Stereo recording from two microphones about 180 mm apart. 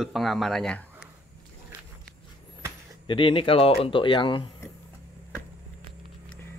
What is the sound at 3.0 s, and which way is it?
Speech, 30° left (ahead or behind).